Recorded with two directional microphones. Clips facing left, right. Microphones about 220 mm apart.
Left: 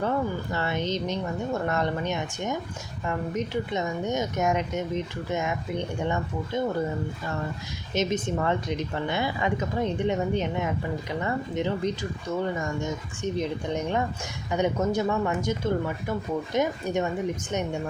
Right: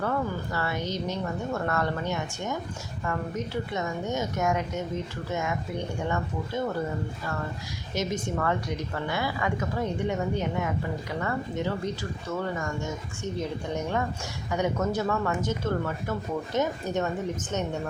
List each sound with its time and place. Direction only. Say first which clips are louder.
0.0 s a woman's voice: left 2 dB; 20° left (ahead or behind)
7.9 s a woman's voice: left 3 dB; 20° left (ahead or behind)